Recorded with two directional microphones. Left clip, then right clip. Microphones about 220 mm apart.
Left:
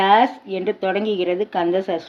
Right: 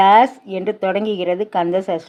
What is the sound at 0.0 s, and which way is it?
Speech, 30° right (ahead or behind).